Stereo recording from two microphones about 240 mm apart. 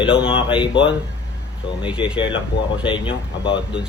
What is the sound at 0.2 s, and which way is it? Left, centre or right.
Speech, left.